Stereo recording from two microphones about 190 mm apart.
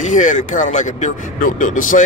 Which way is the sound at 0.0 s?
40° left (ahead or behind).